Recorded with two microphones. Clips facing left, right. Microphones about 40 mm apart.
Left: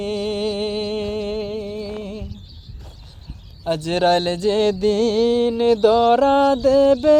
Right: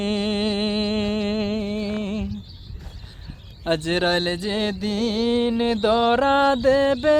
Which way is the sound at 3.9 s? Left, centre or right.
Centre.